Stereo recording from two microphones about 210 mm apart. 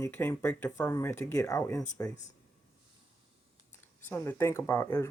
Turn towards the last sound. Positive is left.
turn(degrees=10)  # may be behind; listen again after turning